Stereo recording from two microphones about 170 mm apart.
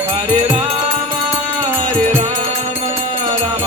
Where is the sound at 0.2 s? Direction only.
35° right (ahead or behind).